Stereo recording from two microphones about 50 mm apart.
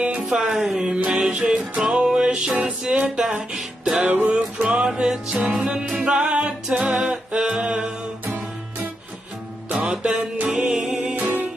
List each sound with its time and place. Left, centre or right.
0.0 s music: right
0.3 s music: centre
0.9 s music: right
5.3 s music: right
5.5 s music: centre
7.1 s a sound: centre
9.8 s music: centre
11.1 s music: right